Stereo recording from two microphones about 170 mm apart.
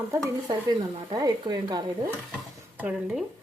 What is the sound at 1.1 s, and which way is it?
Speech, 25° right (ahead or behind).